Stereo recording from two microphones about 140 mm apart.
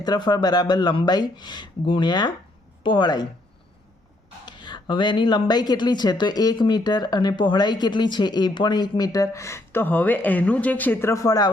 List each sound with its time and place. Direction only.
0.0 s speech: 30° left (ahead or behind)
4.4 s speech: 35° left (ahead or behind)